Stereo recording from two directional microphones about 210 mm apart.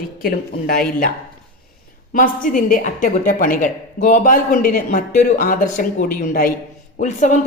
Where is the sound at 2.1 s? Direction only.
40° left (ahead or behind).